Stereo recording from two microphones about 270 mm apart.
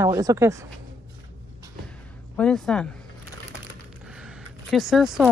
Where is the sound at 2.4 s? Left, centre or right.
Centre.